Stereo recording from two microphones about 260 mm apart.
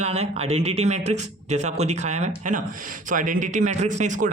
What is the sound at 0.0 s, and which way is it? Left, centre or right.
Speech, right.